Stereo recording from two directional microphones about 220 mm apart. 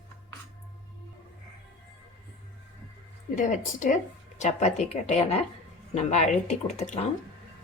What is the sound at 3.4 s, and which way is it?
Speech, 35° left (ahead or behind).